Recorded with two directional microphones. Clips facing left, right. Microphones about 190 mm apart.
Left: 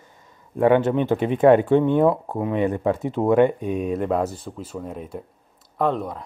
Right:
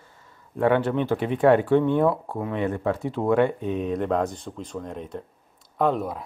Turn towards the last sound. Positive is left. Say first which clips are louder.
# even
turn(degrees=-5)  # may be behind; listen again after turning